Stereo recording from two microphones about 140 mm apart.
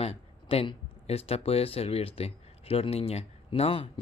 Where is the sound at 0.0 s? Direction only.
45° left (ahead or behind).